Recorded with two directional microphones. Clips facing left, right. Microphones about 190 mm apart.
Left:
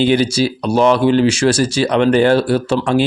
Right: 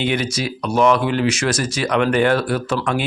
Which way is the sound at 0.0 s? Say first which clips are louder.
Left 8 dB; 30° left (ahead or behind).